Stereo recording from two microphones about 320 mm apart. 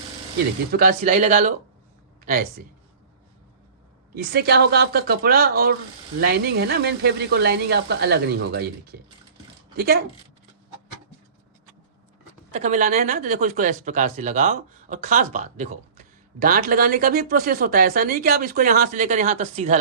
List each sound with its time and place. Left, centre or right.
0.7 s speech: right
4.1 s speech: right
12.5 s speech: right